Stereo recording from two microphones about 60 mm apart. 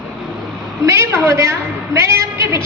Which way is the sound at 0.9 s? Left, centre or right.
Right.